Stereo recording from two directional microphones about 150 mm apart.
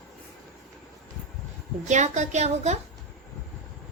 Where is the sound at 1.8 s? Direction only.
50° right (ahead or behind).